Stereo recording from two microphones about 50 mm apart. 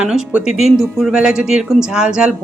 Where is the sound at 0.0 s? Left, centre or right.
Centre.